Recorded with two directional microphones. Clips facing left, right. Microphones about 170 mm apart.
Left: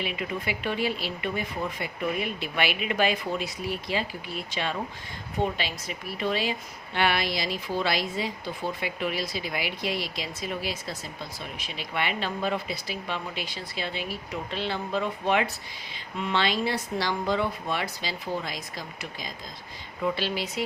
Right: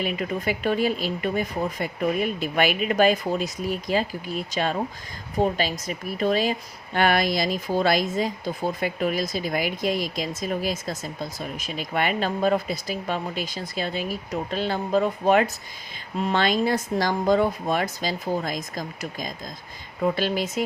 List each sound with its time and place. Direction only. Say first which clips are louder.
0.0 s a woman's voice: right 5 dB; 45° right (ahead or behind)